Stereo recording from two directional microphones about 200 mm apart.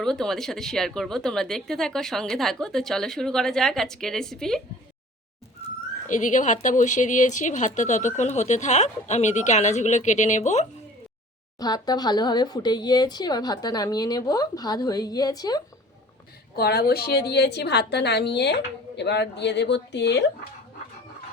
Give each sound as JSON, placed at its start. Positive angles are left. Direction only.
{"t": 0.0, "sound": "a woman's voice", "side_deg": 0}
{"t": 6.1, "sound": "speech", "side_deg": 40}
{"t": 11.6, "sound": "speech", "side_deg": 20}
{"t": 16.6, "sound": "a woman's voice", "side_deg": 55}